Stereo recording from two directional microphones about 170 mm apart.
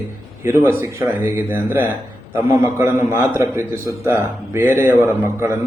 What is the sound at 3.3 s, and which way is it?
Speech, 15° right (ahead or behind).